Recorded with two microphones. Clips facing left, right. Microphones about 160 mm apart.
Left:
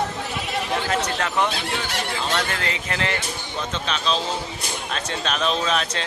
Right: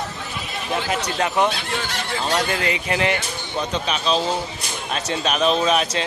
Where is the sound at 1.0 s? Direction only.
15° right (ahead or behind).